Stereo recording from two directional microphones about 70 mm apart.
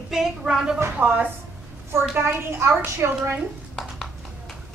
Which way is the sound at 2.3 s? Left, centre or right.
Right.